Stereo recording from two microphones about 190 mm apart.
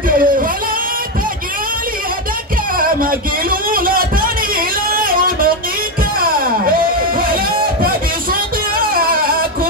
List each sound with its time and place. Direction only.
0.1 s music: 45° right (ahead or behind)
2.8 s a sound: 50° right (ahead or behind)
6.8 s music: 50° right (ahead or behind)
8.9 s music: 50° right (ahead or behind)